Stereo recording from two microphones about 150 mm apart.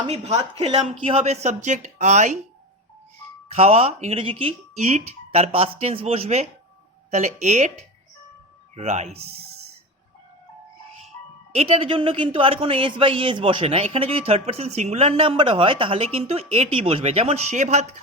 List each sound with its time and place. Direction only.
0.6 s speech: 45° right (ahead or behind)
3.5 s speech: 45° right (ahead or behind)
8.7 s speech: 45° right (ahead or behind)
11.5 s speech: 40° right (ahead or behind)